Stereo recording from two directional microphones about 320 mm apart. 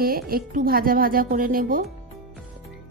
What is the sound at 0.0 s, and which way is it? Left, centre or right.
Speech, right.